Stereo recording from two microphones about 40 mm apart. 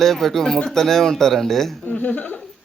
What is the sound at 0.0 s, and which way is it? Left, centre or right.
Speech, centre.